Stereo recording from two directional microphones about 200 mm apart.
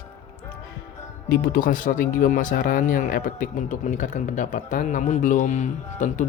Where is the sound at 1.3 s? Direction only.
45° left (ahead or behind).